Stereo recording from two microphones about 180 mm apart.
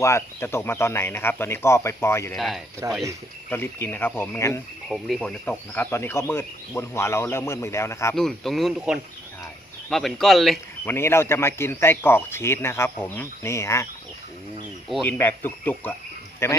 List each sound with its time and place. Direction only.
0.0 s speech: 15° left (ahead or behind)
2.3 s speech: centre (ahead or behind)
2.8 s speech: 20° right (ahead or behind)
3.5 s speech: 10° left (ahead or behind)
4.9 s speech: centre (ahead or behind); by 8.1 s 15° left (ahead or behind)
8.1 s speech: centre (ahead or behind)
10.8 s speech: 15° left (ahead or behind)
15.0 s speech: 10° left (ahead or behind)